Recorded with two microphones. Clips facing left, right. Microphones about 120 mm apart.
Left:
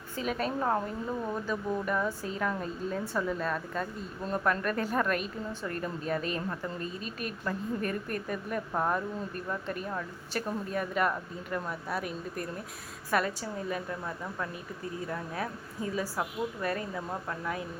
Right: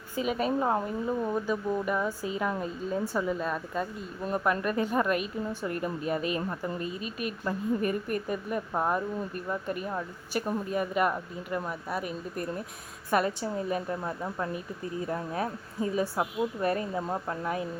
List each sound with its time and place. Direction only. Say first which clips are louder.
0.2 s speech: right 4 dB; 5° right (ahead or behind)
13.1 s a woman's voice: right 3 dB; 25° right (ahead or behind)